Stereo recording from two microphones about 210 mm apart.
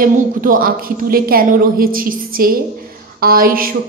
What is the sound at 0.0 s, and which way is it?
A woman's voice, 40° right (ahead or behind).